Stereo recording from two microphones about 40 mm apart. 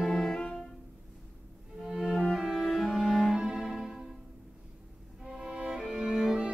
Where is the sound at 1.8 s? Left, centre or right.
Centre.